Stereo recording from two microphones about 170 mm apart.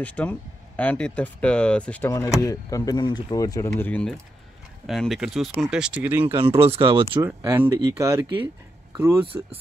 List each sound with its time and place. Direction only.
0.0 s speech: 10° left (ahead or behind)
2.4 s speech: 20° left (ahead or behind)
4.8 s speech: centre (ahead or behind)
6.4 s speech: 35° right (ahead or behind)
7.2 s speech: 10° right (ahead or behind)